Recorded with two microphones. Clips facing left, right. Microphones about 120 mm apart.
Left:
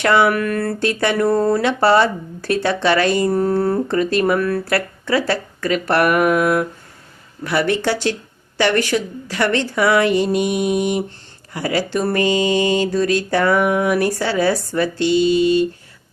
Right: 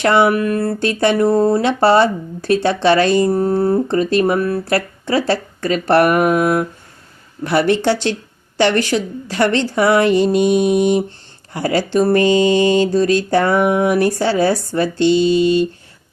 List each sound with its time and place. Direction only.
0.0 s speech: 25° right (ahead or behind)